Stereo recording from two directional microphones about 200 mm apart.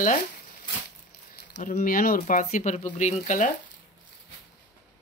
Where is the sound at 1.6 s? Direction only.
45° left (ahead or behind).